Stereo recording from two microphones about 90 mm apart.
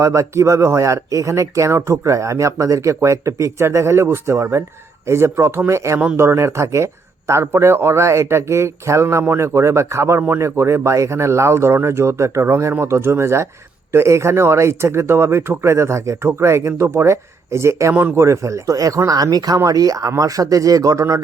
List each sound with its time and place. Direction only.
0.0 s a man's voice: 35° right (ahead or behind)
17.9 s a man's voice: 20° right (ahead or behind)
18.2 s speech: 35° right (ahead or behind)